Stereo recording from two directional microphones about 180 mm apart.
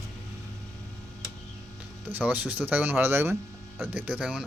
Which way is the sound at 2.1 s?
10° right (ahead or behind).